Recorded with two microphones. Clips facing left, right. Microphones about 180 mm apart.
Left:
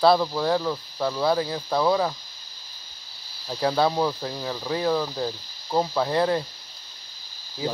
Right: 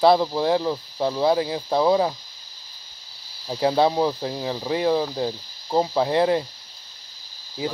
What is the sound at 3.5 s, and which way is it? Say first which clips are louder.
Speech: right 3 dB; 20° right (ahead or behind).